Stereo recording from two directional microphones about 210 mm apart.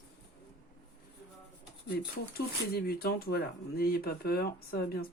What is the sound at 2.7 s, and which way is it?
Speech, 50° left (ahead or behind).